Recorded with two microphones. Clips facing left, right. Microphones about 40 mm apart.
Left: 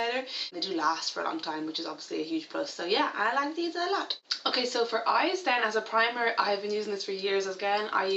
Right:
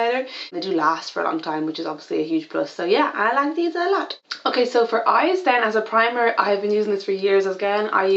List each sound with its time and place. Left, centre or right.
0.0 s a sound: centre
0.6 s speech: centre
1.2 s speech: right
1.7 s speech: centre